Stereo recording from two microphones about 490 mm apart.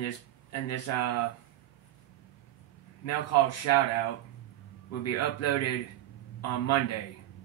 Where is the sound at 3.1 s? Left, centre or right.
Left.